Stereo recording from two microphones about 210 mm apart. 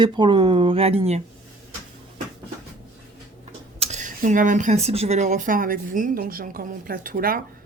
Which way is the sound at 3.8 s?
35° right (ahead or behind).